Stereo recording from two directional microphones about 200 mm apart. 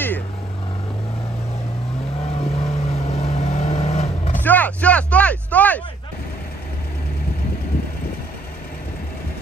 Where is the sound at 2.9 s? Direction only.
30° left (ahead or behind).